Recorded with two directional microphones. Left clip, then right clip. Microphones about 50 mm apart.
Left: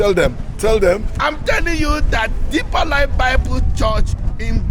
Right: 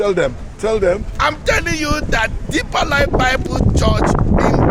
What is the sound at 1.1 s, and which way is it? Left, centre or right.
A man's voice, centre.